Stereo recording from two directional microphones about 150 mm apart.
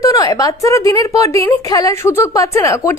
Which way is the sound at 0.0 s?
20° left (ahead or behind).